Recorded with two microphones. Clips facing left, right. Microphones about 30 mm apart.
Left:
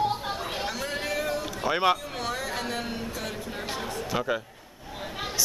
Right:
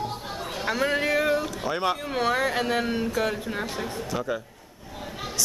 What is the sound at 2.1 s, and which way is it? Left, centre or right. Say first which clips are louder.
Speech: right 7 dB; right.